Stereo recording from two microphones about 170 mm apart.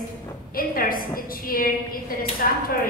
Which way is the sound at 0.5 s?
60° left (ahead or behind).